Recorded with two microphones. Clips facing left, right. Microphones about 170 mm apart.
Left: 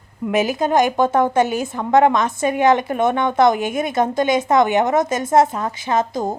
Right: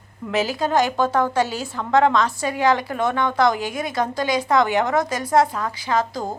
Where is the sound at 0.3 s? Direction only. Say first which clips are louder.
Left 4 dB; 20° left (ahead or behind).